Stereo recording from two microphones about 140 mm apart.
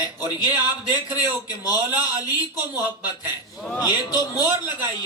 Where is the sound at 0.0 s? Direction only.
30° left (ahead or behind).